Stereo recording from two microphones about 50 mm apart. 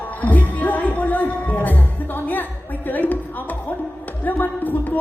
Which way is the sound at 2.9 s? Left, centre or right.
Left.